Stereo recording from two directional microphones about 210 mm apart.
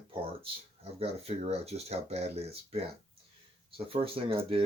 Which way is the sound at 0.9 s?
30° right (ahead or behind).